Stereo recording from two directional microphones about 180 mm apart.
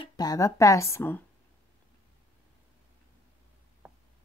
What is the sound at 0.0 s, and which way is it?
A woman's voice, 20° left (ahead or behind).